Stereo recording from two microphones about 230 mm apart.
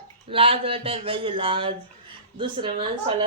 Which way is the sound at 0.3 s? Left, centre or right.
Right.